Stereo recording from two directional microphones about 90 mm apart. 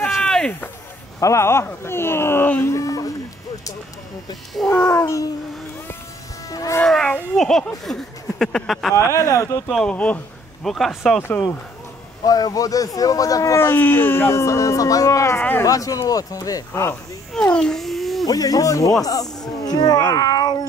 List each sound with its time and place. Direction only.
0.2 s a sound: 5° left (ahead or behind)
1.2 s speech: 30° left (ahead or behind)
2.7 s speech: 40° left (ahead or behind)
4.6 s speech: 30° left (ahead or behind)
6.5 s speech: 40° left (ahead or behind)
6.8 s speech: 10° left (ahead or behind)
8.9 s speech: 35° left (ahead or behind)
9.8 s speech: 15° left (ahead or behind)
10.6 s speech: 5° left (ahead or behind)
11.1 s speech: 20° left (ahead or behind)
12.3 s speech: 45° left (ahead or behind)
13.6 s speech: 25° left (ahead or behind)
17.3 s a sound: 10° left (ahead or behind)
18.2 s speech: 45° left (ahead or behind)